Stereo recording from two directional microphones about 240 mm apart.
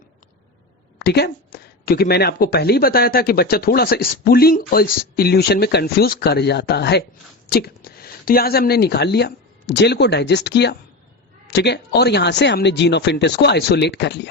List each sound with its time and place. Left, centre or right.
0.9 s speech: left